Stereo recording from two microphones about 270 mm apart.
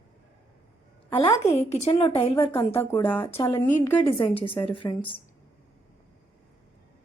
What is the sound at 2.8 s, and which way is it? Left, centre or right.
Speech, centre.